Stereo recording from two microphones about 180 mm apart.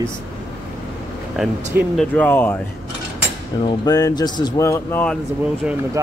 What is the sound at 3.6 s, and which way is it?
Speech, 20° left (ahead or behind).